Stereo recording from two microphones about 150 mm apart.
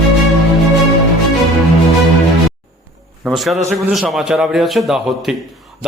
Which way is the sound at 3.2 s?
Centre (ahead or behind).